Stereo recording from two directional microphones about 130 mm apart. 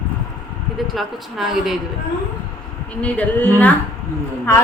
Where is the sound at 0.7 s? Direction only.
Centre (ahead or behind).